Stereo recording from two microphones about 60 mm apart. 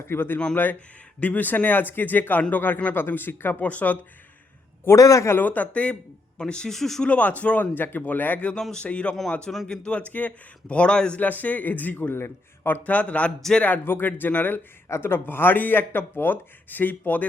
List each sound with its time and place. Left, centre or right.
0.1 s speech: left
4.9 s a man's voice: left
5.3 s a man's voice: left; by 7.0 s centre
7.0 s a man's voice: left
10.1 s a man's voice: left
11.2 s a man's voice: left
12.8 s a man's voice: left
13.8 s speech: left
14.8 s speech: left